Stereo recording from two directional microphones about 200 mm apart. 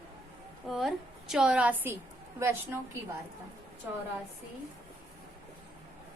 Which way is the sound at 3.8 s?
10° right (ahead or behind).